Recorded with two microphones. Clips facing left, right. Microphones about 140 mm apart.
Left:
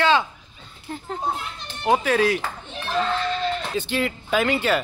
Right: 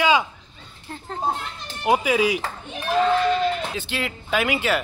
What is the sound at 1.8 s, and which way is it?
Speech, 10° right (ahead or behind).